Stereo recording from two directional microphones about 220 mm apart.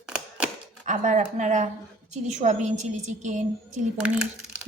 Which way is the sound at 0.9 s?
35° right (ahead or behind).